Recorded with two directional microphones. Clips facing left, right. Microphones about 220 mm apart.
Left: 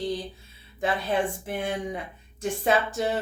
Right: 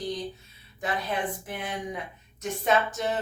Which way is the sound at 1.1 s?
30° left (ahead or behind).